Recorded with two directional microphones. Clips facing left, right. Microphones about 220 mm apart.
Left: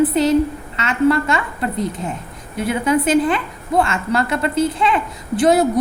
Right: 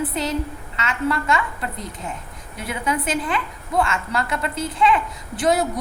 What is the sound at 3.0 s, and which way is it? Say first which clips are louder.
A woman's voice: left 8 dB; 30° left (ahead or behind).